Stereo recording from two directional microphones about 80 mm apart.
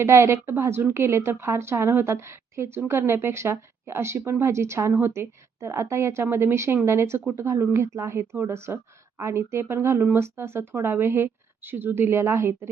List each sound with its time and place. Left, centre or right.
0.1 s a woman's voice: right